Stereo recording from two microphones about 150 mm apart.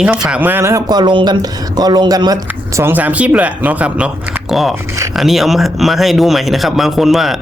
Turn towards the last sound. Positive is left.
turn(degrees=0)  # may be behind; listen again after turning